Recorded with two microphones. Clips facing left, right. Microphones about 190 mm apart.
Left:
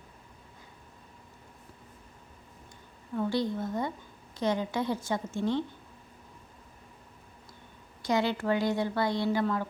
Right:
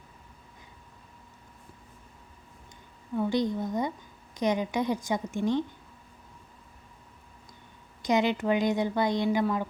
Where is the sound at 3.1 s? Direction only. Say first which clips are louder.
Right 2 dB; 15° right (ahead or behind).